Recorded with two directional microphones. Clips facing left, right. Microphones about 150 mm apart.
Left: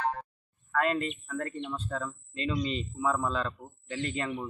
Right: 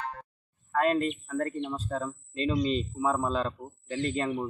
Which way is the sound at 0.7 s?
35° right (ahead or behind).